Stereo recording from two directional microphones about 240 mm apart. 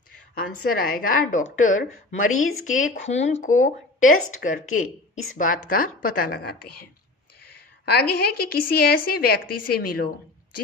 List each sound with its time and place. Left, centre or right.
0.3 s a woman's voice: left
2.3 s speech: left
2.7 s a woman's voice: left
4.6 s speech: left
5.6 s a woman's voice: left
8.1 s a woman's voice: left
9.5 s a woman's voice: left
9.7 s a woman's voice: left